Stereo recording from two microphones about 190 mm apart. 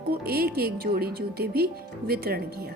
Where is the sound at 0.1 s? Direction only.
55° right (ahead or behind).